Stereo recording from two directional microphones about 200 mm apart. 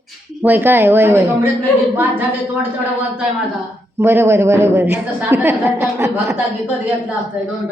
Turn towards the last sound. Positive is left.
turn(degrees=-15)  # may be behind; listen again after turning